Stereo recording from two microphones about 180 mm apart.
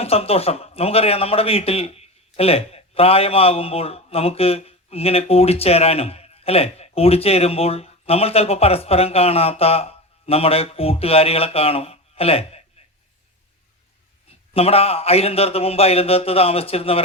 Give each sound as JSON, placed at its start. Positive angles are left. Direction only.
{"t": 0.0, "sound": "a man's voice", "side_deg": 35}
{"t": 14.5, "sound": "a man's voice", "side_deg": 35}